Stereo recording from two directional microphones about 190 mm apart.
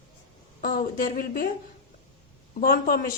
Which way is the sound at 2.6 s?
50° left (ahead or behind).